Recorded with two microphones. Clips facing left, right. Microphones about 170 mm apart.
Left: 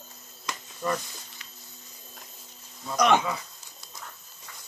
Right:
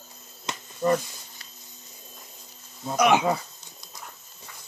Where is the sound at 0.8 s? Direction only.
40° right (ahead or behind).